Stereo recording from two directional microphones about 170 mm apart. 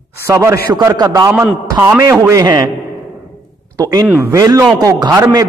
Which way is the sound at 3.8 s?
20° right (ahead or behind).